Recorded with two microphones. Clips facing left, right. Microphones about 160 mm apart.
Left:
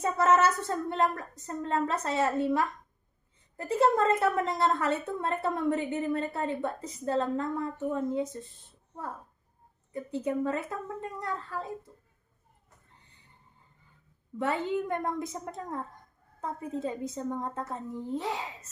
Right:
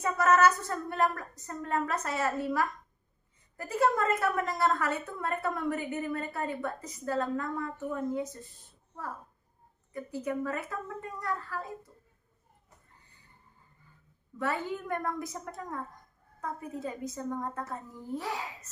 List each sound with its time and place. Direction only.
0.0 s a woman's voice: 25° left (ahead or behind)
9.9 s a woman's voice: 25° left (ahead or behind)
14.4 s a woman's voice: 20° left (ahead or behind)